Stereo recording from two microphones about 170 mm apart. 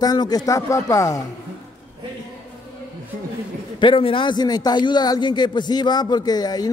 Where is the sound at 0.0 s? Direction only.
20° left (ahead or behind).